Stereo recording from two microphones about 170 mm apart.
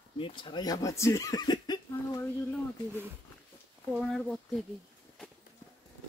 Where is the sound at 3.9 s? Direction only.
5° right (ahead or behind).